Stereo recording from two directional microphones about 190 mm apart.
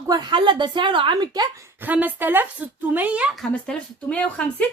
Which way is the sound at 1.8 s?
10° right (ahead or behind).